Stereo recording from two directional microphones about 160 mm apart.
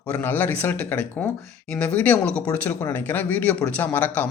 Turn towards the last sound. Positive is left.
turn(degrees=10)  # may be behind; listen again after turning